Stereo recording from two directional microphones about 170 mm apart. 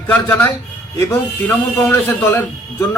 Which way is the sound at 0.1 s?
10° left (ahead or behind).